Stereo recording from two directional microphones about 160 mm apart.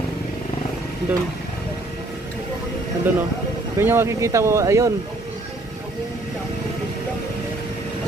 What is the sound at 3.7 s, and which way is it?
Speech, 15° right (ahead or behind).